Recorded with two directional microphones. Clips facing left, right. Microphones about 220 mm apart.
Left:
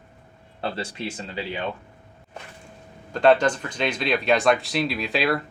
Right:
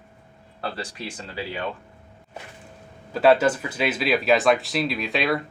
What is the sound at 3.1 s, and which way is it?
Speech, 5° right (ahead or behind).